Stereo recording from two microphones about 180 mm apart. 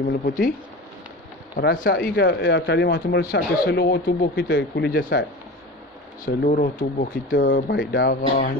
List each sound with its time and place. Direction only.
0.2 s speech: 55° left (ahead or behind)
1.6 s speech: 55° left (ahead or behind)
6.2 s speech: 50° left (ahead or behind)
7.7 s speech: 80° left